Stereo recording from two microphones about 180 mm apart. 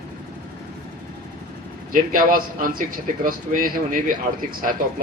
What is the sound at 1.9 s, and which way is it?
A man's voice, 50° right (ahead or behind).